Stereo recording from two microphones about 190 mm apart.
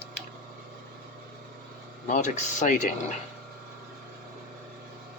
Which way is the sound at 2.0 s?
40° left (ahead or behind).